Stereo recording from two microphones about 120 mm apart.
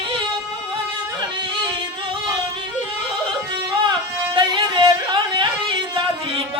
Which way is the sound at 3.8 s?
40° right (ahead or behind).